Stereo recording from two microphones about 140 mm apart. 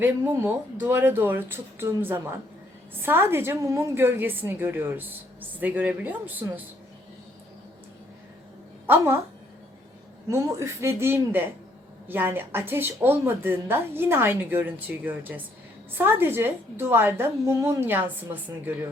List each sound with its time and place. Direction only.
0.0 s a woman's voice: 15° right (ahead or behind)
8.9 s a woman's voice: 20° right (ahead or behind)
10.2 s a woman's voice: 25° right (ahead or behind)